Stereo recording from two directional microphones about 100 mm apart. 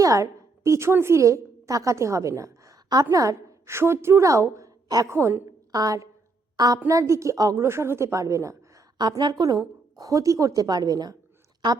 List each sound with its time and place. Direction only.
0.0 s a woman's voice: 35° right (ahead or behind)
5.1 s a woman's voice: 25° right (ahead or behind)
5.7 s a woman's voice: 35° right (ahead or behind)
9.0 s a woman's voice: 45° right (ahead or behind)